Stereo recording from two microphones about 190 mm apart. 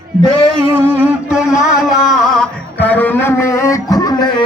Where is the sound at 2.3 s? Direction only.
5° left (ahead or behind).